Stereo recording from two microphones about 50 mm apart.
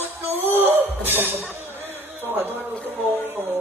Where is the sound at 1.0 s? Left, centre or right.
Right.